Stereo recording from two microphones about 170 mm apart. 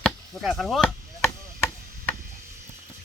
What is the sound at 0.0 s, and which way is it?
Speech, centre (ahead or behind).